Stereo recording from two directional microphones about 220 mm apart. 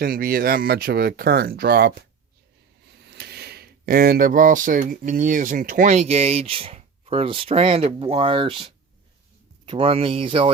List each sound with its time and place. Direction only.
0.0 s speech: 40° right (ahead or behind); by 10.5 s 25° right (ahead or behind)